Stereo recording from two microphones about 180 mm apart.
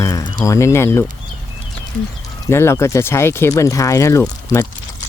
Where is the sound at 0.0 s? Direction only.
20° left (ahead or behind).